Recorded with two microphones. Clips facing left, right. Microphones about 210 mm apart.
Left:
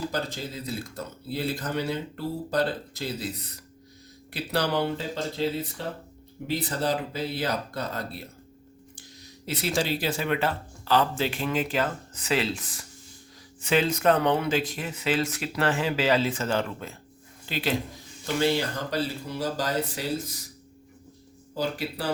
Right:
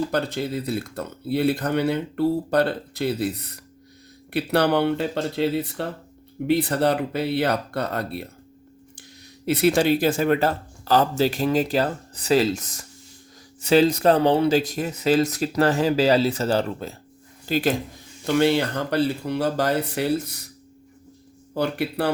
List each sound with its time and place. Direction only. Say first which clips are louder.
0.1 s speech: right 7 dB; 65° right (ahead or behind)
9.5 s speech: right 9 dB; 60° right (ahead or behind); by 17.7 s 45° right (ahead or behind)
18.3 s speech: right 5 dB; 60° right (ahead or behind)
21.5 s speech: right 6 dB; 65° right (ahead or behind)